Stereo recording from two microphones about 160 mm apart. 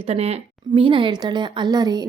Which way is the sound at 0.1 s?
40° right (ahead or behind).